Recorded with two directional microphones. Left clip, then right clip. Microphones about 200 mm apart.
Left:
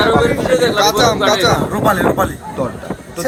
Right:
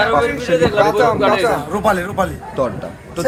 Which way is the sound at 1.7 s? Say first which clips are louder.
Left 3 dB; 20° right (ahead or behind).